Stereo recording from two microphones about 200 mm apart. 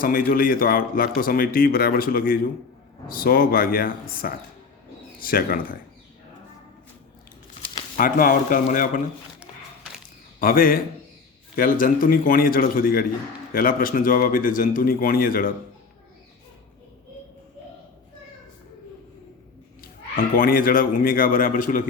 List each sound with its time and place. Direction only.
0.0 s speech: 45° left (ahead or behind)
7.9 s speech: 45° left (ahead or behind)
10.4 s speech: 45° left (ahead or behind)
19.8 s speech: 45° left (ahead or behind)